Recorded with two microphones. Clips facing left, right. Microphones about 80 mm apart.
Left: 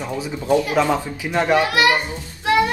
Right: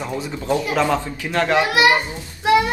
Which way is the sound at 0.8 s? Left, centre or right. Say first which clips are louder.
Left 1 dB; centre.